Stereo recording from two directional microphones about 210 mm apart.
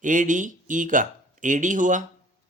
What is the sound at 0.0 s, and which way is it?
Speech, 40° right (ahead or behind).